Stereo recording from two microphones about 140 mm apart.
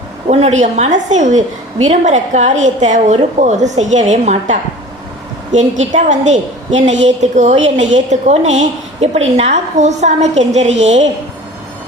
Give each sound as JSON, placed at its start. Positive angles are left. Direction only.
{"t": 0.3, "sound": "a woman's voice", "side_deg": -50}
{"t": 5.5, "sound": "a woman's voice", "side_deg": -60}